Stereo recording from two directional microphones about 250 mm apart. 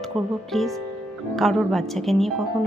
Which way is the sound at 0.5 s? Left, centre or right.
Centre.